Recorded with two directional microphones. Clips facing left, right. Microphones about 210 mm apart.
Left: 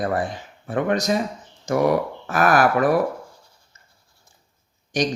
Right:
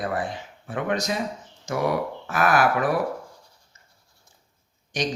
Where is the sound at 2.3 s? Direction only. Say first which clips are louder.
Left 3 dB; 40° left (ahead or behind).